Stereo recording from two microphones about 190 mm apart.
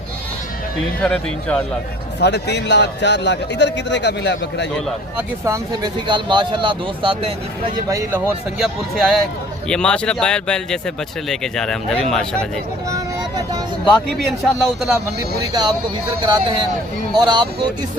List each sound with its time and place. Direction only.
1.0 s speech: 5° left (ahead or behind)
2.1 s a man's voice: 65° left (ahead or behind)
5.1 s speech: 20° right (ahead or behind)
7.9 s speech: 15° right (ahead or behind); by 12.3 s 5° left (ahead or behind)
12.9 s vehicle: 20° right (ahead or behind)
14.4 s speech: centre (ahead or behind)
15.4 s speech: 20° right (ahead or behind)